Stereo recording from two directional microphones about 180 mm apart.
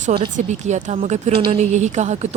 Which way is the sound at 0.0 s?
30° right (ahead or behind).